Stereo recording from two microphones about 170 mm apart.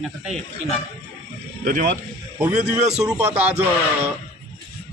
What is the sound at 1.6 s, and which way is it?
Speech, 50° right (ahead or behind).